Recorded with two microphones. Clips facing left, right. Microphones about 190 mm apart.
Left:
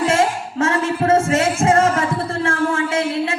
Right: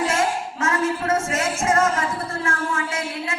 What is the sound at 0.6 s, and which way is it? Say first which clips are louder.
Music: left 5 dB; 30° left (ahead or behind).